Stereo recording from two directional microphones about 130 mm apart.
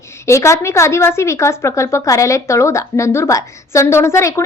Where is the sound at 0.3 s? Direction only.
20° left (ahead or behind).